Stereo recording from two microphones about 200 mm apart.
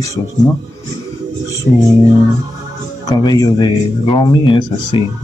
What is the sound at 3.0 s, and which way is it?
Speech, 15° left (ahead or behind).